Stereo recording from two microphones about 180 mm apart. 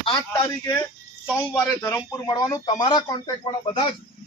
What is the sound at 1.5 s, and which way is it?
A man's voice, 20° left (ahead or behind).